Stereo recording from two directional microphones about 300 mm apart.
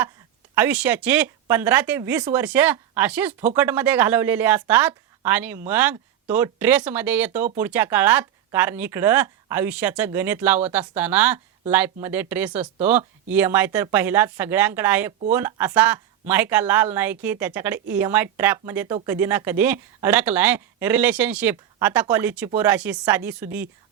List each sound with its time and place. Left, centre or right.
0.5 s a woman's voice: centre